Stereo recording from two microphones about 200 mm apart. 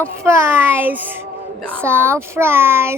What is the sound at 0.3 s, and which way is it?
A woman's voice, 10° right (ahead or behind).